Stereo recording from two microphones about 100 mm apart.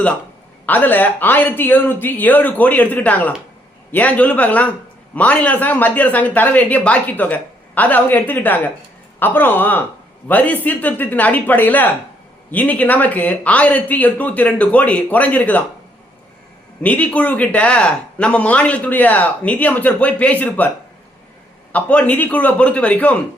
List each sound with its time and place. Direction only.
0.6 s speech: 15° left (ahead or behind)
16.8 s speech: 15° left (ahead or behind)
21.7 s speech: 15° left (ahead or behind)